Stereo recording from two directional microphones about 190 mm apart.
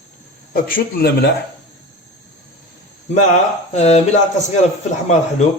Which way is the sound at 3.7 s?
35° left (ahead or behind).